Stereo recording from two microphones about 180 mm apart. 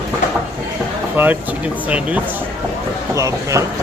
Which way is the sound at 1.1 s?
10° right (ahead or behind).